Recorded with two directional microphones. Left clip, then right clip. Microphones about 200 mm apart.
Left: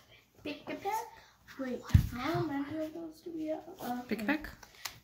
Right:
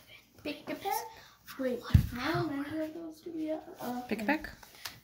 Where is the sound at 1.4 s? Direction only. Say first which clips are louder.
Right 5 dB; 50° right (ahead or behind).